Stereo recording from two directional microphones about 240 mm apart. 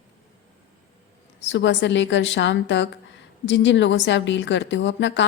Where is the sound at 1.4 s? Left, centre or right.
Left.